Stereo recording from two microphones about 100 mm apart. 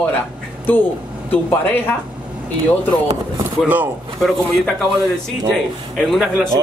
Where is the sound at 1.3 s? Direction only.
20° left (ahead or behind).